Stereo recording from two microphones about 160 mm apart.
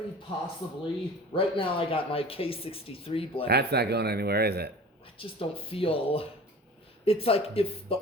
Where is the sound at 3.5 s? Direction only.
90° right.